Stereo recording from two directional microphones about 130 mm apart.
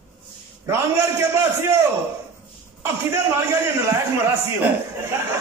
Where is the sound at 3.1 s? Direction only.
20° right (ahead or behind).